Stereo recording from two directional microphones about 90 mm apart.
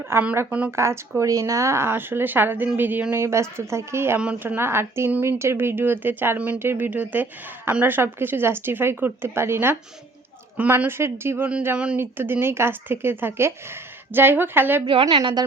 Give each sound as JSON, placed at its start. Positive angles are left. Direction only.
{"t": 0.1, "sound": "speech", "side_deg": -25}
{"t": 0.8, "sound": "speech", "side_deg": -30}
{"t": 15.1, "sound": "a woman's voice", "side_deg": -60}